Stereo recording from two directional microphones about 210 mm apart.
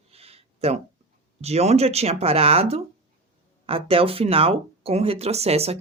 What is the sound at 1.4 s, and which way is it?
Speech, 30° right (ahead or behind).